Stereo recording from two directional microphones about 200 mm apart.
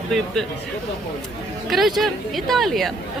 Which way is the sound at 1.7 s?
Centre (ahead or behind).